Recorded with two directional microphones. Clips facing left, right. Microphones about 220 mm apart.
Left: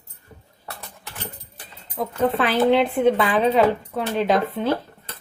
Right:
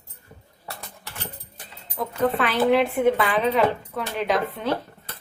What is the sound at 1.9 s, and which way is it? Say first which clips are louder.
Speech: left 2 dB; 25° left (ahead or behind).